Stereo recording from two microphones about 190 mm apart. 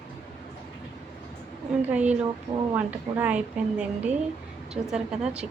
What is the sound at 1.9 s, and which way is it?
A woman's voice, 5° right (ahead or behind).